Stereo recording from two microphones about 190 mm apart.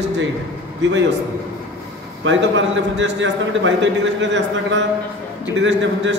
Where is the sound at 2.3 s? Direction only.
75° right (ahead or behind).